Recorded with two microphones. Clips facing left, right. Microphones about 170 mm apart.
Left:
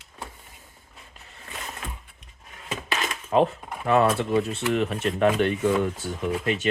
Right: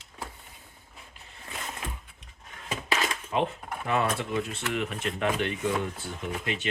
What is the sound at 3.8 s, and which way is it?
Speech, 35° left (ahead or behind).